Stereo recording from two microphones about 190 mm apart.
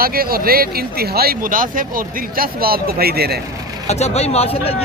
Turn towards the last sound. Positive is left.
turn(degrees=30)  # may be behind; listen again after turning